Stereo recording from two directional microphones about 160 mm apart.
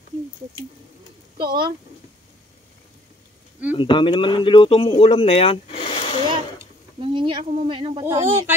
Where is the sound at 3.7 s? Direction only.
30° left (ahead or behind).